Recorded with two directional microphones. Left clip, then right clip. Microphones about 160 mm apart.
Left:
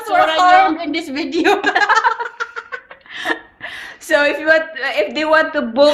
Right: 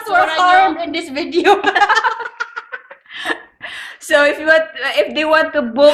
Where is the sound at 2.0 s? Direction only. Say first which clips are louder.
Left 1 dB; 5° left (ahead or behind).